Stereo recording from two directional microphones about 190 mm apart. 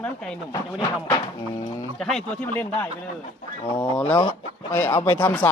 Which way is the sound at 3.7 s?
25° left (ahead or behind).